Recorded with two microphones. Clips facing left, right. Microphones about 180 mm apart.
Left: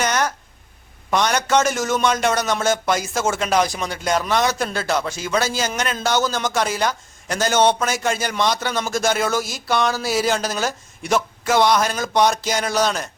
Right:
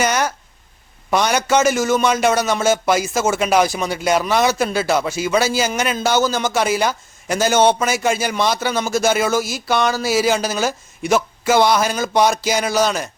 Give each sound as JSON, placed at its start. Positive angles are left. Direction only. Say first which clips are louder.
{"t": 0.0, "sound": "a man's voice", "louder": "right 2 dB", "side_deg": -5}